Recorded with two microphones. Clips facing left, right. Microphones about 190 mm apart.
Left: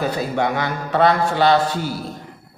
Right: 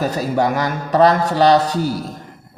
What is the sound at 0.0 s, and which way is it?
Speech, 40° right (ahead or behind).